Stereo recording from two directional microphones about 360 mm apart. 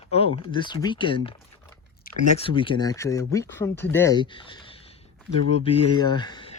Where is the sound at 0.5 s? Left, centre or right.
Centre.